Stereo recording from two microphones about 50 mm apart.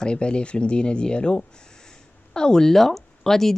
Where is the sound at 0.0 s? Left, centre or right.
Centre.